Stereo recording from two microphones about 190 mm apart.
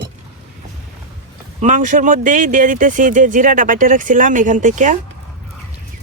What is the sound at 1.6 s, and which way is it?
Speech, 40° right (ahead or behind).